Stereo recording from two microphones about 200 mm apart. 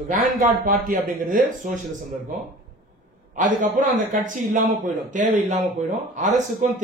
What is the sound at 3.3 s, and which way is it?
Speech, 40° right (ahead or behind).